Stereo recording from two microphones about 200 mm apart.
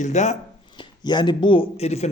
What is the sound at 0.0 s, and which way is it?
Speech, 35° left (ahead or behind).